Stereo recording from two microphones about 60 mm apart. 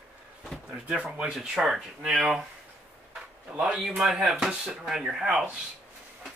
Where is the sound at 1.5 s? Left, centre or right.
Centre.